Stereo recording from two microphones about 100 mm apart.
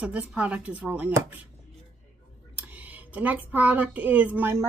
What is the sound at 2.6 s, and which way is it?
A child's voice, 15° right (ahead or behind).